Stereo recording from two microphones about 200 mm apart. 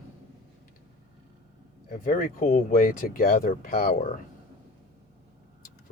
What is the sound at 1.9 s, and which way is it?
Speech, 45° left (ahead or behind).